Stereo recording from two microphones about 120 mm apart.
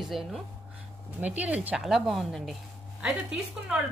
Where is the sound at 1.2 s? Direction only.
15° right (ahead or behind).